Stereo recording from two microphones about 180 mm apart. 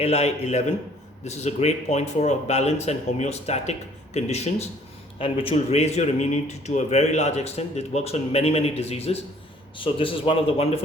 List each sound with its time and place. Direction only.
0.0 s speech: 35° left (ahead or behind)